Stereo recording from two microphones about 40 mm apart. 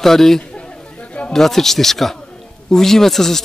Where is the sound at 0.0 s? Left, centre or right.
Centre.